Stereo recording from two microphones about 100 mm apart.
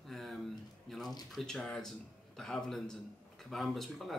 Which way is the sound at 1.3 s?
5° left (ahead or behind).